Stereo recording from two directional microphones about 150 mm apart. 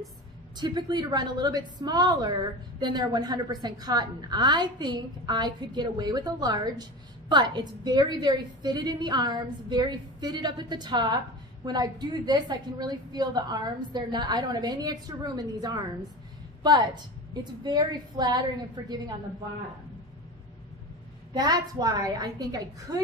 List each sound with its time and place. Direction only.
0.6 s a woman's voice: 30° right (ahead or behind)
21.3 s a woman's voice: 25° right (ahead or behind)